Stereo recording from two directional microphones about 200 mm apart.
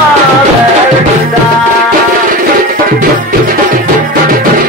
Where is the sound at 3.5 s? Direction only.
45° right (ahead or behind).